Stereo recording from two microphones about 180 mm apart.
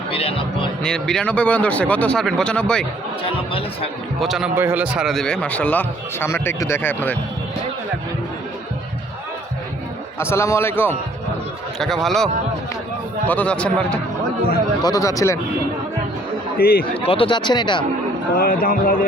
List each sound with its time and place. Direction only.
0.1 s speech: 30° left (ahead or behind)
0.8 s speech: 5° left (ahead or behind)
3.2 s speech: 30° left (ahead or behind)
4.2 s a man's voice: centre (ahead or behind)
10.2 s a man's voice: 15° left (ahead or behind)
11.8 s a man's voice: centre (ahead or behind)
14.8 s a man's voice: 20° left (ahead or behind)
16.6 s a man's voice: 60° left (ahead or behind)
17.0 s speech: 30° left (ahead or behind)
18.3 s speech: 55° left (ahead or behind)